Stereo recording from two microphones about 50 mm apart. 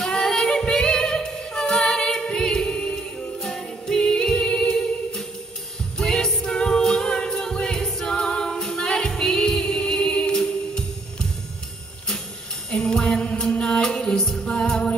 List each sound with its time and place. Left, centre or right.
0.0 s music: centre
12.7 s music: centre